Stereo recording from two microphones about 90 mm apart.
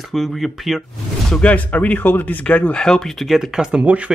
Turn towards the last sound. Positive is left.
turn(degrees=-15)  # may be behind; listen again after turning